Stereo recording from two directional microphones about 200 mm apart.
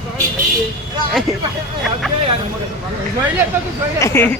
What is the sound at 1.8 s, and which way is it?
Speech, centre (ahead or behind).